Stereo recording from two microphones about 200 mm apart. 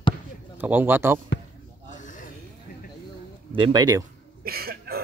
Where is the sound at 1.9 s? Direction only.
40° left (ahead or behind).